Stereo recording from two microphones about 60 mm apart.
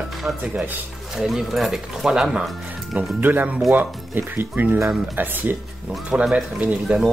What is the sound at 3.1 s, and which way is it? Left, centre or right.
Speech, right.